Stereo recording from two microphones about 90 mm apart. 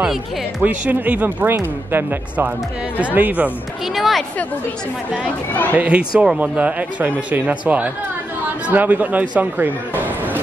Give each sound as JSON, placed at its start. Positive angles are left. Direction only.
{"t": 0.6, "sound": "speech", "side_deg": -15}
{"t": 3.8, "sound": "a woman's voice", "side_deg": 0}
{"t": 5.1, "sound": "speech", "side_deg": 20}
{"t": 5.8, "sound": "speech", "side_deg": -15}
{"t": 10.0, "sound": "a sound", "side_deg": -20}